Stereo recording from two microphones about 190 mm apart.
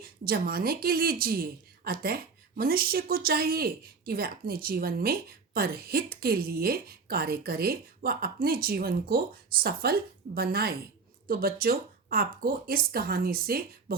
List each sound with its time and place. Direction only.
0.0 s a woman's voice: 50° right (ahead or behind)